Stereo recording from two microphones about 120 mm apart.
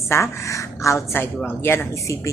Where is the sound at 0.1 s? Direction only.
25° left (ahead or behind).